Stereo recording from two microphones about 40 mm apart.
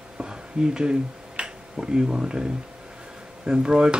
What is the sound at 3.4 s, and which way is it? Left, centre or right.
Speech, centre.